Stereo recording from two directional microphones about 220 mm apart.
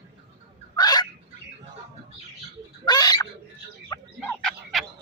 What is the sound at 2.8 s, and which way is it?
Fowl, 15° left (ahead or behind).